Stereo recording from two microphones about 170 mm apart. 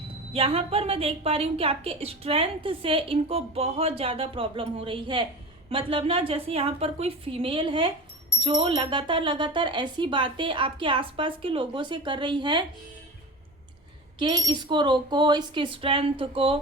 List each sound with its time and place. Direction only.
0.3 s a woman's voice: 35° right (ahead or behind)
14.2 s speech: 25° right (ahead or behind)